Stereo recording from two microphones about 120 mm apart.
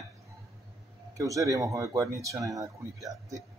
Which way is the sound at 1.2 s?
25° right (ahead or behind).